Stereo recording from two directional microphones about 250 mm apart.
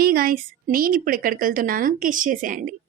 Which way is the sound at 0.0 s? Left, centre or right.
Right.